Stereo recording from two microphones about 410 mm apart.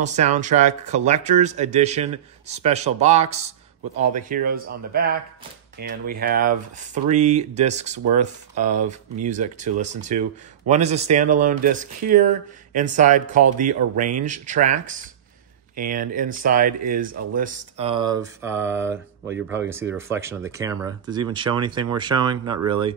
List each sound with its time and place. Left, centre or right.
0.0 s speech: centre